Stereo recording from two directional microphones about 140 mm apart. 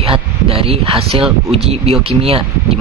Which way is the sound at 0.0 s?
40° right (ahead or behind).